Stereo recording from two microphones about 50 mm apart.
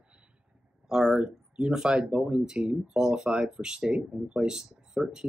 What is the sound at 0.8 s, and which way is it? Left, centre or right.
Speech, centre.